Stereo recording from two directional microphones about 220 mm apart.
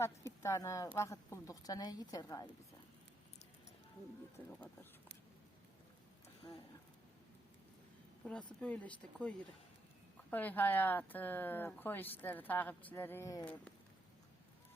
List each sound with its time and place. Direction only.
0.4 s speech: 15° left (ahead or behind)
4.4 s speech: 10° left (ahead or behind)
8.2 s speech: 5° left (ahead or behind)